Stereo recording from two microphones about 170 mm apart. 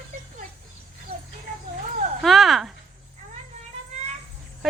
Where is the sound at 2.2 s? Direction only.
Centre (ahead or behind).